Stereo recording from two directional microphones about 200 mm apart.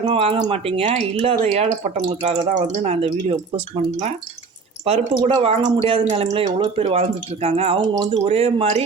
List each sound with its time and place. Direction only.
0.0 s speech: 30° right (ahead or behind)